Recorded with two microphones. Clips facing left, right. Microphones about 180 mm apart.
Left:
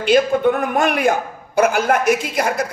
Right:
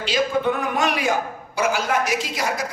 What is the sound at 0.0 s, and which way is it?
A man's voice, 55° left (ahead or behind).